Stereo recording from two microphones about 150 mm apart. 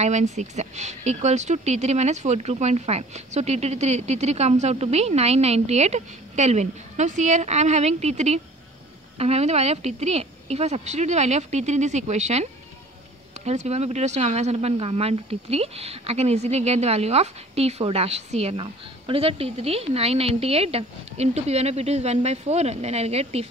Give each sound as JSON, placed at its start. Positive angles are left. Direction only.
{"t": 0.0, "sound": "speech", "side_deg": -50}
{"t": 13.5, "sound": "speech", "side_deg": -45}